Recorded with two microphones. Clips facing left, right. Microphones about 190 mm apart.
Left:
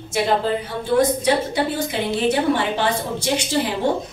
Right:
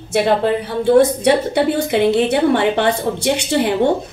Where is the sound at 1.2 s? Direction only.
65° right (ahead or behind).